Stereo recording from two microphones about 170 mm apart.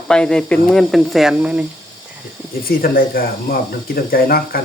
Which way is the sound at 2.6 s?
60° left (ahead or behind).